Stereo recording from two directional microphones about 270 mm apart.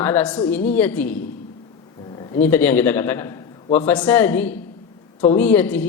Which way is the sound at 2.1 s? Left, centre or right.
Centre.